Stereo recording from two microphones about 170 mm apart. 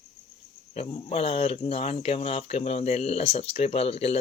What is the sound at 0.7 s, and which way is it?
Speech, 35° left (ahead or behind).